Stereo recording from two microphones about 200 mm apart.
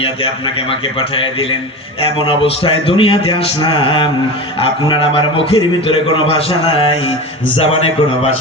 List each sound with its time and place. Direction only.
0.0 s a man's voice: 30° left (ahead or behind)
2.1 s a man's voice: 25° left (ahead or behind)